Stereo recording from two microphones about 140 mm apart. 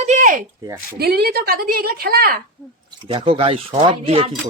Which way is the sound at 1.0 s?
90° right.